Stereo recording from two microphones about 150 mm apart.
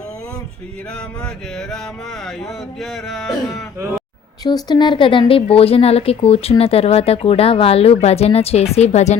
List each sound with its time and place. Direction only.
1.2 s speech: 5° left (ahead or behind)
4.4 s speech: 30° left (ahead or behind); by 9.1 s 50° left (ahead or behind)